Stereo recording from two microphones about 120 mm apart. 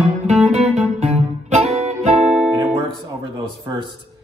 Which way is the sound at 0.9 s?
65° right (ahead or behind).